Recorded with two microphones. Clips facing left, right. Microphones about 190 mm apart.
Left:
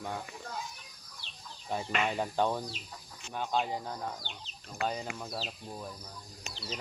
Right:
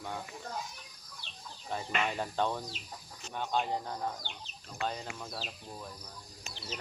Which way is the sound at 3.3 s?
5° left (ahead or behind).